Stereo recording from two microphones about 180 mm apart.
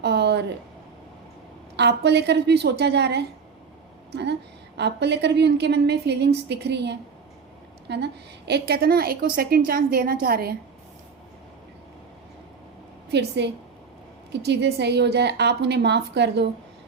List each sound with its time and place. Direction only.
0.0 s a sound: 65° right (ahead or behind)
1.7 s a woman's voice: 70° right (ahead or behind)
13.1 s a woman's voice: 70° right (ahead or behind)